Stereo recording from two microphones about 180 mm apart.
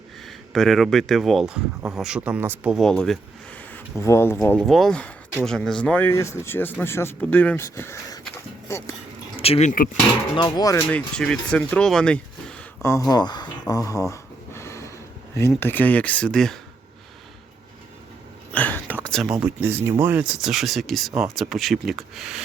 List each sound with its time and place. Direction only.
0.3 s speech: centre (ahead or behind)
4.4 s speech: 5° left (ahead or behind)
9.3 s speech: 35° left (ahead or behind)
10.3 s speech: 25° left (ahead or behind); by 16.6 s 5° left (ahead or behind)
18.5 s whispering: 10° left (ahead or behind)
18.9 s speech: 5° left (ahead or behind)